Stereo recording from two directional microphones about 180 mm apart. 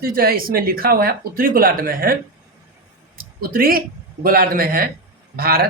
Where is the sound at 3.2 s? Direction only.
55° right (ahead or behind).